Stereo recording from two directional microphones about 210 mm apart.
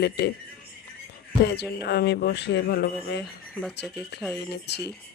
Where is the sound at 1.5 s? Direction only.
50° left (ahead or behind).